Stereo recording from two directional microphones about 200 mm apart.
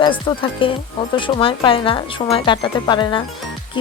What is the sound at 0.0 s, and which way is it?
Speech, 25° left (ahead or behind).